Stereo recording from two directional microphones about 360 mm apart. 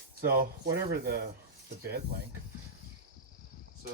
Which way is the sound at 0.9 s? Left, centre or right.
Right.